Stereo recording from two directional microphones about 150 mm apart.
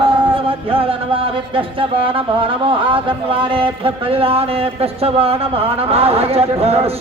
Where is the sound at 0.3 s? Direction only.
35° right (ahead or behind).